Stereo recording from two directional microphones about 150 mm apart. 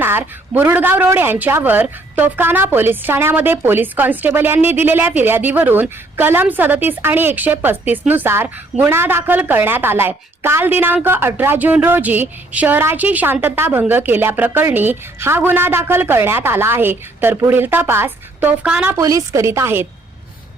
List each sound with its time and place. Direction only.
0.0 s a woman's voice: 15° right (ahead or behind)
18.9 s a woman's voice: 20° right (ahead or behind)